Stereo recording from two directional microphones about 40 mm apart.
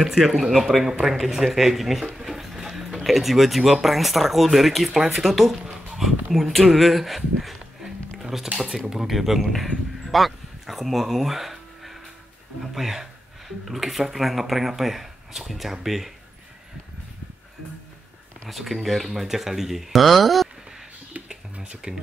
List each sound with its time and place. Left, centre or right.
0.0 s speech: centre
8.2 s a sound: centre
8.9 s speech: centre
18.5 s speech: centre
21.5 s speech: right